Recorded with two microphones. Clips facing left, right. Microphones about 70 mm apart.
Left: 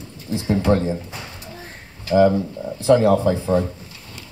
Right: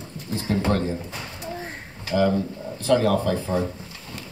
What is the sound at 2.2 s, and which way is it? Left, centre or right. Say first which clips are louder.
Speech: left 6 dB; centre.